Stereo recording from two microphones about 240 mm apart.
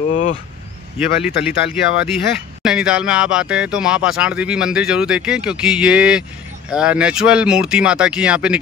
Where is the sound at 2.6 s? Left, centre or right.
Centre.